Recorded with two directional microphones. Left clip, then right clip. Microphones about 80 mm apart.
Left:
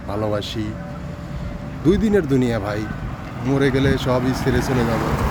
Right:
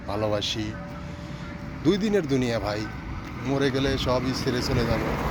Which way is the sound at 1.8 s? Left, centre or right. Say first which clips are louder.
Left 6 dB; left.